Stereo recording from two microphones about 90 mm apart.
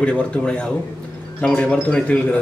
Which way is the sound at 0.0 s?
10° left (ahead or behind).